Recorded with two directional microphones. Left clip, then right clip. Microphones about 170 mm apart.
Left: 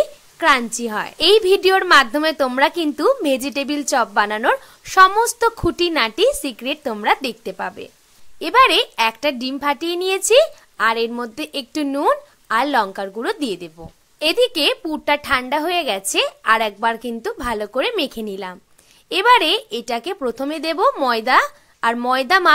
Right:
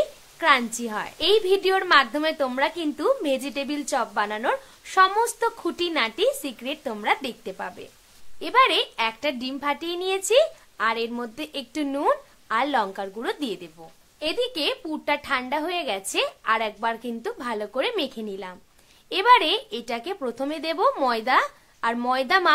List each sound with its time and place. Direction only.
0.4 s a woman's voice: 30° left (ahead or behind)
14.2 s a woman's voice: 40° left (ahead or behind)